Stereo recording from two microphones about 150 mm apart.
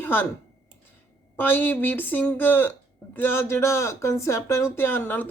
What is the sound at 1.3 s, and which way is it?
Speech, 10° left (ahead or behind).